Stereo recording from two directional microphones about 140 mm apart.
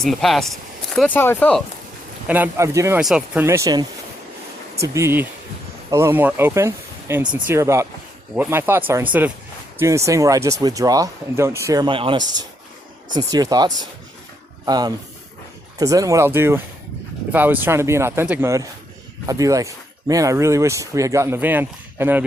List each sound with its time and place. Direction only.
0.0 s speech: centre (ahead or behind)
1.1 s speech: 15° left (ahead or behind)
2.2 s speech: 15° right (ahead or behind)
3.0 s speech: 5° right (ahead or behind)
3.4 s speech: 20° right (ahead or behind)
4.9 s speech: 15° right (ahead or behind)